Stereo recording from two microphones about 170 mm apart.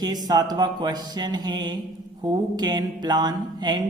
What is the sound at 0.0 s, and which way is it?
A man's voice, 25° right (ahead or behind).